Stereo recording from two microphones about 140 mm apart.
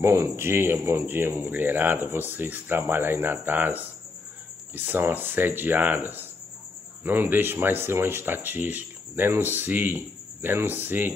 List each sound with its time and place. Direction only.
0.0 s speech: 20° right (ahead or behind)